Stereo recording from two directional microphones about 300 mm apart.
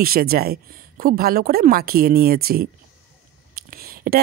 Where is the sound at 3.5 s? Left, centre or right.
Right.